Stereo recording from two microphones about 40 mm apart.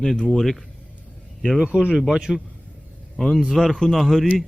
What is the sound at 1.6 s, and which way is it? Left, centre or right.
Speech, right.